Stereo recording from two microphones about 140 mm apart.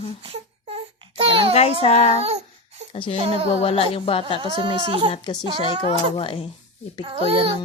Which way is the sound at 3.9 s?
40° left (ahead or behind).